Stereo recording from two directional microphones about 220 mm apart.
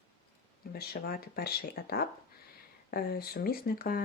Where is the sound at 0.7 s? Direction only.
45° left (ahead or behind).